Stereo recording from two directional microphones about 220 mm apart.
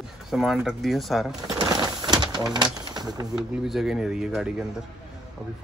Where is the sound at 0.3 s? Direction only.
Centre (ahead or behind).